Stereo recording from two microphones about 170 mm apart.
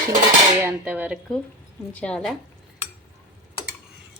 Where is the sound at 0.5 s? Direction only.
10° right (ahead or behind).